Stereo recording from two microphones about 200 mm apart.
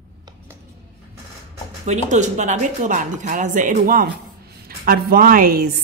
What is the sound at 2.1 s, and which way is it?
A woman's voice, 35° right (ahead or behind).